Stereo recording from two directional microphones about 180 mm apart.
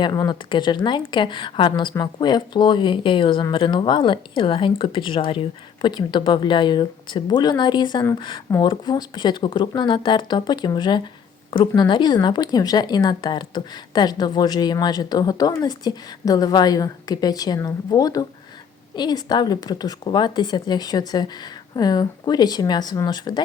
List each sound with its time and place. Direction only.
0.0 s speech: 20° left (ahead or behind)